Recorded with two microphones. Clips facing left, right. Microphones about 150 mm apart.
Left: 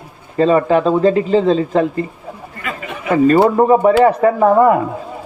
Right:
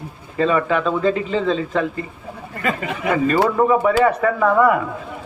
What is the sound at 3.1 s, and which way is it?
Speech, 40° left (ahead or behind).